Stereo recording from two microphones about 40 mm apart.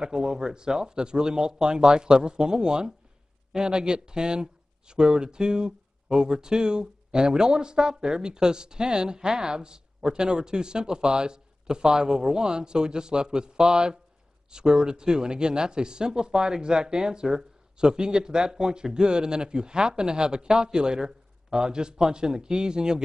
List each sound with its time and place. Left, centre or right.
0.0 s speech: centre